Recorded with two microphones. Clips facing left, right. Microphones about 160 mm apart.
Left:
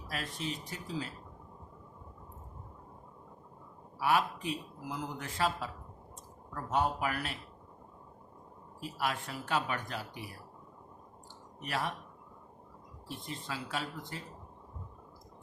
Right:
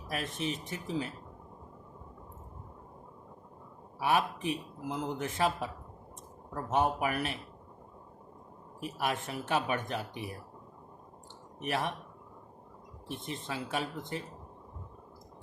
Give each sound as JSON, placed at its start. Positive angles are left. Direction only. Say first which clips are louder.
{"t": 0.1, "sound": "speech", "louder": "right 4 dB", "side_deg": -20}
{"t": 4.0, "sound": "speech", "louder": "right 1 dB", "side_deg": -20}
{"t": 8.8, "sound": "speech", "louder": "right 2 dB", "side_deg": -20}
{"t": 11.6, "sound": "speech", "louder": "right 3 dB", "side_deg": -20}
{"t": 13.1, "sound": "speech", "louder": "right 3 dB", "side_deg": -20}